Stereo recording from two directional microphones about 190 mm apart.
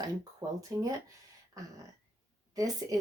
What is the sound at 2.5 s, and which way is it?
Speech, 20° right (ahead or behind).